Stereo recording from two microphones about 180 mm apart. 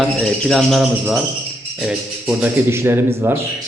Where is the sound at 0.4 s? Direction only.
Centre (ahead or behind).